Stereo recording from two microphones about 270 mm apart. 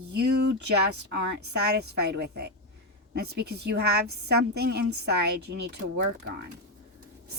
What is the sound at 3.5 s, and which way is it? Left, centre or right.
A woman's voice, right.